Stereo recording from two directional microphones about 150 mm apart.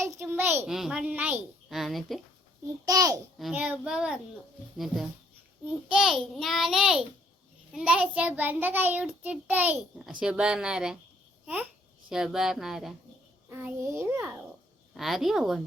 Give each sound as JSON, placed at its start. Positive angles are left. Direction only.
{"t": 0.0, "sound": "a sound", "side_deg": -15}
{"t": 0.7, "sound": "a woman's voice", "side_deg": -5}
{"t": 2.8, "sound": "a child's voice", "side_deg": -25}
{"t": 3.5, "sound": "a woman's voice", "side_deg": -10}
{"t": 5.6, "sound": "a woman's voice", "side_deg": -5}
{"t": 7.8, "sound": "child singing", "side_deg": -5}
{"t": 11.4, "sound": "a child's voice", "side_deg": -10}
{"t": 13.5, "sound": "child singing", "side_deg": -15}
{"t": 14.9, "sound": "a woman's voice", "side_deg": 0}